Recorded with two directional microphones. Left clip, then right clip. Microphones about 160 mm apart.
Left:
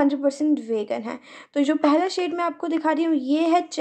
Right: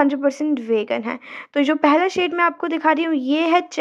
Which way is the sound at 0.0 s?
20° right (ahead or behind).